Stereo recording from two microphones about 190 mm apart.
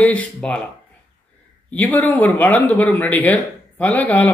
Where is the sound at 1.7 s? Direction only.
10° left (ahead or behind).